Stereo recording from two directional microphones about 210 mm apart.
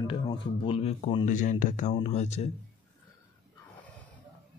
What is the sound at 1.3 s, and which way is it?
Speech, 35° left (ahead or behind).